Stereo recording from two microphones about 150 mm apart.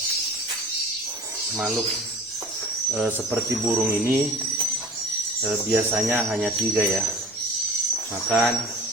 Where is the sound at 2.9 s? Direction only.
10° right (ahead or behind).